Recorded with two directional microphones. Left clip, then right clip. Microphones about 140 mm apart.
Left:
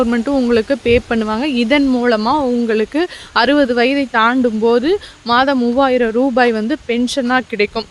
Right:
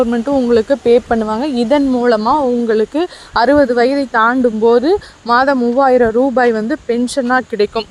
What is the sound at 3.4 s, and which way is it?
Speech, 40° left (ahead or behind).